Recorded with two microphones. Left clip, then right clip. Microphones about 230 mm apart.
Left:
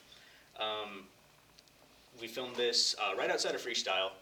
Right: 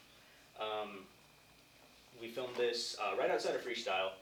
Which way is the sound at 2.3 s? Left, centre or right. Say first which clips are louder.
Left 4 dB; left.